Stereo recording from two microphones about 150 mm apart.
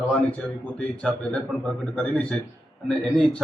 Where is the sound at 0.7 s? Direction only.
5° left (ahead or behind).